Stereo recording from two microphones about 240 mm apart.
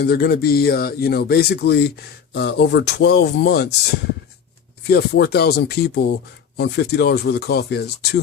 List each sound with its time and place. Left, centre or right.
0.0 s speech: left
4.9 s speech: left